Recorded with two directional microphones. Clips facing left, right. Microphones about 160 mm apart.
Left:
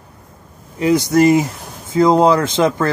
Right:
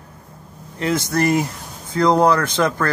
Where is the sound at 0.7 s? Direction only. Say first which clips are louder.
Left 7 dB; 15° left (ahead or behind).